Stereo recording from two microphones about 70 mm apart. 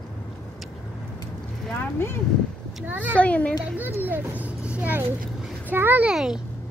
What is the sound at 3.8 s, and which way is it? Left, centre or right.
A child's voice, right.